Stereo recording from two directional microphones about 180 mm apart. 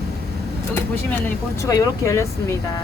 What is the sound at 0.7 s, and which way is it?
Speech, 10° left (ahead or behind).